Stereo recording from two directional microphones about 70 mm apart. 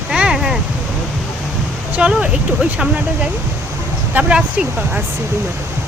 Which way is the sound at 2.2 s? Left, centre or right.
Centre.